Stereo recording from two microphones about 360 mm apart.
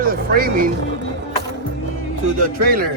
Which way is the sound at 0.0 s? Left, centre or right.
Right.